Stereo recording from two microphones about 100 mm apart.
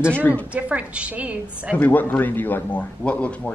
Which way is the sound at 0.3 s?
15° right (ahead or behind).